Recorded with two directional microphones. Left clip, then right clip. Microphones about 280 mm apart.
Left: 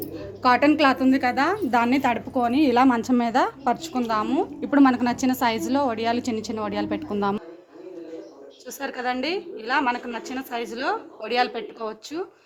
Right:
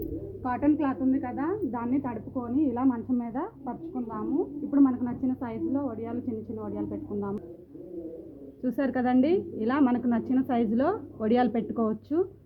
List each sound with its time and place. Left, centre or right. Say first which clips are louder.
0.4 s a woman's voice: left 10 dB; left
8.8 s a woman's voice: right 1 dB; centre